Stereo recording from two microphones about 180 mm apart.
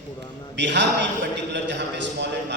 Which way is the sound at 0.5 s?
80° right.